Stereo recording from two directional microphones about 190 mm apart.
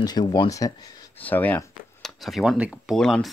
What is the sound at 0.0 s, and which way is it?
Speech, 20° left (ahead or behind).